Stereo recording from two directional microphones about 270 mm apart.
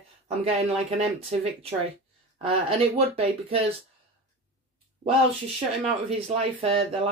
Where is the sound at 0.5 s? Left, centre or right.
Right.